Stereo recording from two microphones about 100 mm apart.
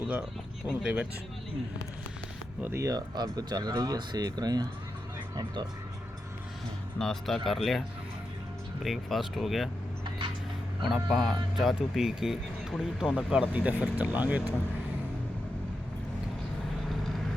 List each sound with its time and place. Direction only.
0.7 s speech: 10° right (ahead or behind)
2.6 s speech: 20° right (ahead or behind)
2.8 s speech: 40° right (ahead or behind)
7.0 s speech: 5° left (ahead or behind)
10.8 s speech: centre (ahead or behind)